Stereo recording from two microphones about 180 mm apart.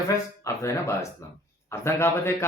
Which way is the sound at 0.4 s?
15° left (ahead or behind).